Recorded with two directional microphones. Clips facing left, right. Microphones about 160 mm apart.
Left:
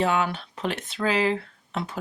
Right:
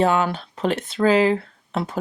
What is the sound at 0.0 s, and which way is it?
Speech, 40° right (ahead or behind).